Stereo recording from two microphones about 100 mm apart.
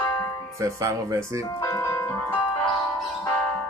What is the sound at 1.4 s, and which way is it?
Ice cream truck, 35° left (ahead or behind).